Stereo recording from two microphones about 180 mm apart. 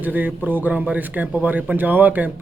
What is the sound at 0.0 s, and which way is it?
A man's voice, 10° right (ahead or behind).